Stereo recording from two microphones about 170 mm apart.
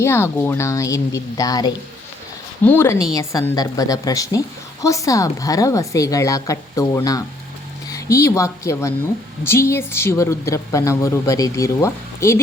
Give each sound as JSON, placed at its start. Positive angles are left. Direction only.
{"t": 0.0, "sound": "a woman's voice", "side_deg": 15}